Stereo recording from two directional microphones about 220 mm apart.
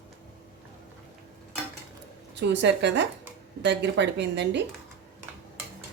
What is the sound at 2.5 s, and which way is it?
Speech, 55° right (ahead or behind).